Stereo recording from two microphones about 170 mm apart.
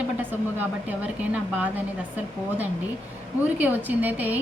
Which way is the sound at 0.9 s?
10° right (ahead or behind).